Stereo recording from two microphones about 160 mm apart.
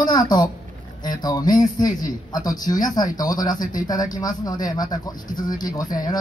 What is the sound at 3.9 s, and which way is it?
Speech, 25° left (ahead or behind).